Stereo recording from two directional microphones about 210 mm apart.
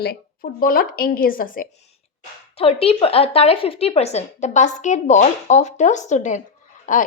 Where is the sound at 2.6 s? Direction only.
25° left (ahead or behind).